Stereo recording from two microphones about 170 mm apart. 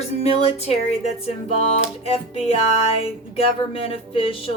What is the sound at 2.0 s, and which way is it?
Speech, 35° left (ahead or behind).